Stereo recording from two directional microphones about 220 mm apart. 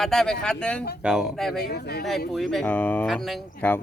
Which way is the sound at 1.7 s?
45° left (ahead or behind).